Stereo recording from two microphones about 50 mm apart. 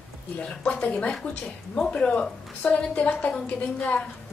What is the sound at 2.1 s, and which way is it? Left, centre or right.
A woman's voice, left.